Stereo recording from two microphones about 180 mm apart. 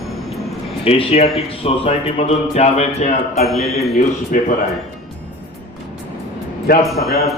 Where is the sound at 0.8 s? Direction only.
30° left (ahead or behind).